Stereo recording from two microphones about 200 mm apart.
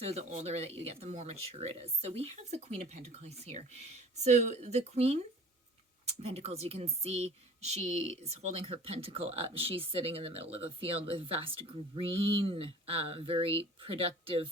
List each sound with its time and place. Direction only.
0.0 s speech: 30° right (ahead or behind)